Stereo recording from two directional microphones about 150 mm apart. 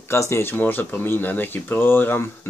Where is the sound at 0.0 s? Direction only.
15° left (ahead or behind).